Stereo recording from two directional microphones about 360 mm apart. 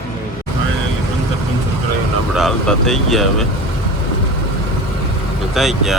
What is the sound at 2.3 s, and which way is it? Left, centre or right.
Speech, centre.